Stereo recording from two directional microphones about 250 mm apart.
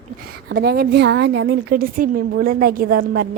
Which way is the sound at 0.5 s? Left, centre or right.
Right.